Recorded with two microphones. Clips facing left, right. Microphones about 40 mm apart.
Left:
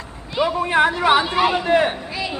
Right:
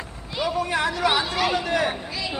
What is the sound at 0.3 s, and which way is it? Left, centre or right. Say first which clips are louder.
Speech: left 6 dB; left.